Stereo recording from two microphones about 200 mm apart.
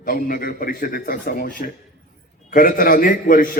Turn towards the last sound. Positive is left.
turn(degrees=45)  # may be behind; listen again after turning